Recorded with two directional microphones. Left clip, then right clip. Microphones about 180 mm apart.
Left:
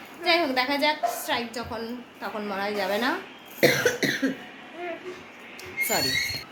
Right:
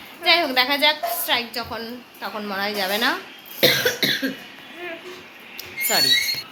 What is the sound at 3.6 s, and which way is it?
Cough, centre (ahead or behind).